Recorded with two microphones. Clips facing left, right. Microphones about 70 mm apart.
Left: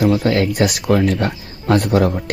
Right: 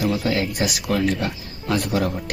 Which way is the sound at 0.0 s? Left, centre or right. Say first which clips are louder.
Left 6 dB; left.